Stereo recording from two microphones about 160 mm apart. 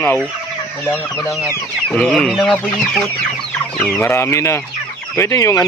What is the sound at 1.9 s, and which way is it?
Speech, 5° left (ahead or behind).